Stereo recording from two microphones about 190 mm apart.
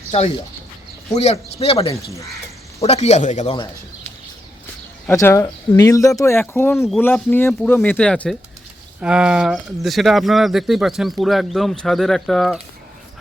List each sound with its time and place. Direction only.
1.1 s speech: 35° left (ahead or behind)
5.0 s speech: 15° left (ahead or behind)